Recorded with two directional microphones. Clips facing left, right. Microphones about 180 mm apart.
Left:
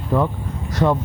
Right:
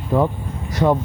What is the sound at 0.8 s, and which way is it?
Speech, 20° right (ahead or behind).